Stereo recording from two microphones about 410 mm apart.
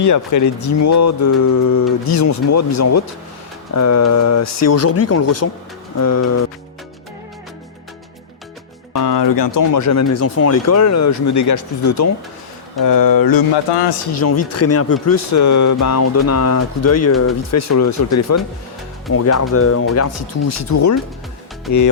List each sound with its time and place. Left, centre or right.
0.0 s speech: left
8.9 s speech: left
14.2 s speech: left